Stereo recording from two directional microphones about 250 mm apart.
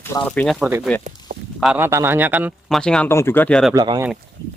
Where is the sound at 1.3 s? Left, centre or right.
Right.